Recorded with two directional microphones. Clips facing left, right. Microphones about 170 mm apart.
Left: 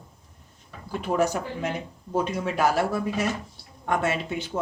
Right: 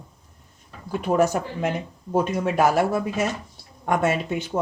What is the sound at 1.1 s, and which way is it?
Speech, 50° right (ahead or behind).